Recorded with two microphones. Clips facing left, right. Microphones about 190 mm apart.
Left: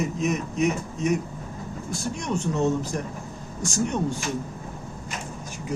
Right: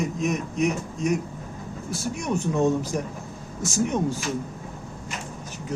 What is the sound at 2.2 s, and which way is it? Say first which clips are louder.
Speech: right 2 dB; 10° right (ahead or behind).